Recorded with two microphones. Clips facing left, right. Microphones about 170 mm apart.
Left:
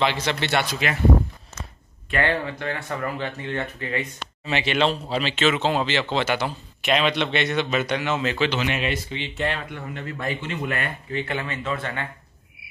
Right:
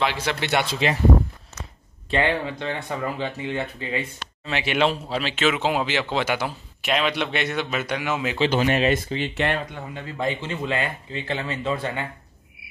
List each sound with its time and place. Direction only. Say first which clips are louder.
0.0 s a man's voice: left 1 dB; 5° right (ahead or behind)
0.7 s speech: right 3 dB; 30° right (ahead or behind)
2.0 s a man's voice: right 1 dB; 20° right (ahead or behind)
8.5 s speech: right 5 dB; 45° right (ahead or behind)
10.0 s a man's voice: right 3 dB; 20° right (ahead or behind)